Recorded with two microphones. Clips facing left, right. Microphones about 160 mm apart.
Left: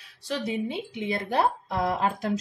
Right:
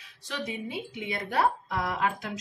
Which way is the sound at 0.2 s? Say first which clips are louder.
Left 6 dB; 35° left (ahead or behind).